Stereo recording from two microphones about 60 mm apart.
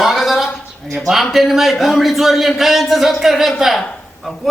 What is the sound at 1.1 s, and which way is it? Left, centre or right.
Speech, centre.